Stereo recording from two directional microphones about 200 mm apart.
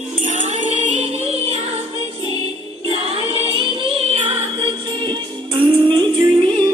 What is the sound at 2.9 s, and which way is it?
Music, 30° right (ahead or behind).